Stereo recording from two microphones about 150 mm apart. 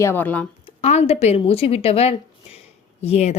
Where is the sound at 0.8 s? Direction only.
45° left (ahead or behind).